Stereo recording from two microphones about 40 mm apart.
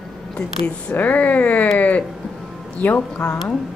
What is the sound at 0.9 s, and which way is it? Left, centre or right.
A woman's voice, left.